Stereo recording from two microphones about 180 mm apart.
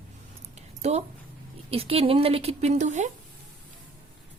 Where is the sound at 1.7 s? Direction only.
30° right (ahead or behind).